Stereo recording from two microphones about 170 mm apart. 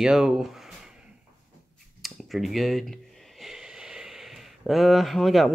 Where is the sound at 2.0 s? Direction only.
Centre (ahead or behind).